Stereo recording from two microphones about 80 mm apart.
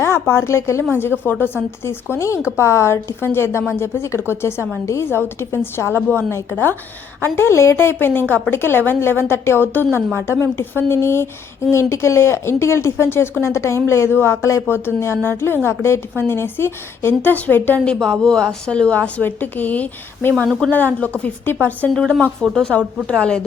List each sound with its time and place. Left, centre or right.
0.0 s speech: left
1.2 s a woman's voice: left
21.8 s speech: centre